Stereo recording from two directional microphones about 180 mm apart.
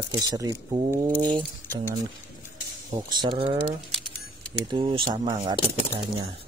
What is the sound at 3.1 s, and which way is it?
Speech, 25° right (ahead or behind).